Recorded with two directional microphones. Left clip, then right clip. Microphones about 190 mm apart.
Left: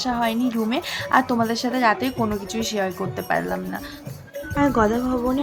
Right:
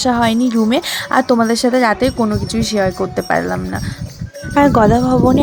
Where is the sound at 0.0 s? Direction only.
45° right (ahead or behind).